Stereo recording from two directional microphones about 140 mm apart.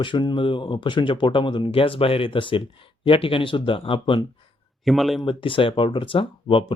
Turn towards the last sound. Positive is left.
turn(degrees=40)  # may be behind; listen again after turning